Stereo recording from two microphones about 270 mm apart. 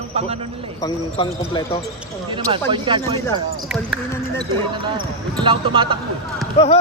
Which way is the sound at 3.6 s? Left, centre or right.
Centre.